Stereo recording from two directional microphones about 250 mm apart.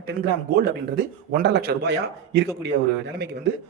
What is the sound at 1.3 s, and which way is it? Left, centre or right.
Speech, right.